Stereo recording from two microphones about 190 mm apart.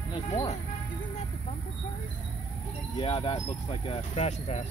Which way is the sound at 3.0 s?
30° left (ahead or behind).